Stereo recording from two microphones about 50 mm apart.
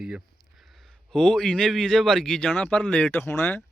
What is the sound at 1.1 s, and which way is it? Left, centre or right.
Speech, centre.